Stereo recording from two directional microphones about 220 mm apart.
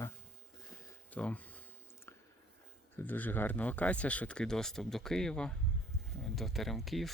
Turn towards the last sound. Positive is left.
turn(degrees=0)  # may be behind; listen again after turning